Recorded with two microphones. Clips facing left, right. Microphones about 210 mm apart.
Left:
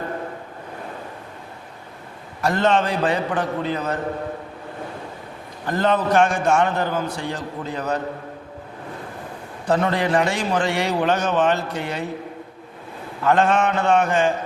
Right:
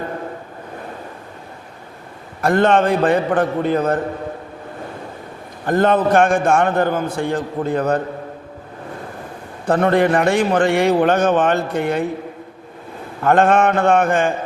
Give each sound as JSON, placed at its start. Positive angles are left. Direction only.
{"t": 2.4, "sound": "a man's voice", "side_deg": -55}
{"t": 5.6, "sound": "a man's voice", "side_deg": -50}
{"t": 9.6, "sound": "a man's voice", "side_deg": -55}
{"t": 13.2, "sound": "a man's voice", "side_deg": -50}